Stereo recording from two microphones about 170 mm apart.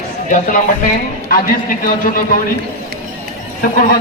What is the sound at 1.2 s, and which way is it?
A man's voice, 55° left (ahead or behind).